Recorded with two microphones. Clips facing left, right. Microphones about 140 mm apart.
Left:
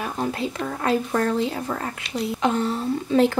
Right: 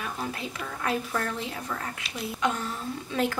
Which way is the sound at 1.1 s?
35° left (ahead or behind).